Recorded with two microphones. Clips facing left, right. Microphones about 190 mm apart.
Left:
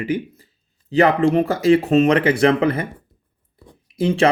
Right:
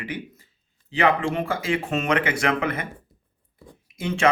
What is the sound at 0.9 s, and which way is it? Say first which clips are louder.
Speech: left 7 dB; 40° left (ahead or behind).